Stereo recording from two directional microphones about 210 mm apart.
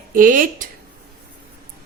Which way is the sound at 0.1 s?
40° right (ahead or behind).